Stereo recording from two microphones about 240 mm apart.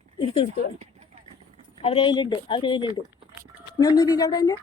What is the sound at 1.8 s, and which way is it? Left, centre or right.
A woman's voice, left.